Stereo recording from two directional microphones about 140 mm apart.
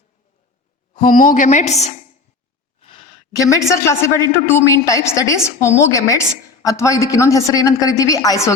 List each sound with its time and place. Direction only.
0.9 s a woman's voice: 85° left; by 2.0 s 55° left (ahead or behind)
2.8 s a sound: 35° left (ahead or behind)
3.4 s a woman's voice: 20° left (ahead or behind)